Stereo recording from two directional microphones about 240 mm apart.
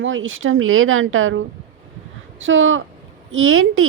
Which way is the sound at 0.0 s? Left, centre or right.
Right.